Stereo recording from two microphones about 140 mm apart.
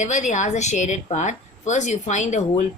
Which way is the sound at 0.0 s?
60° left (ahead or behind).